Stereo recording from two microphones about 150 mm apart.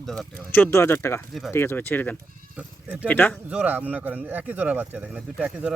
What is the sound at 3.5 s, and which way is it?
Speech, 10° right (ahead or behind).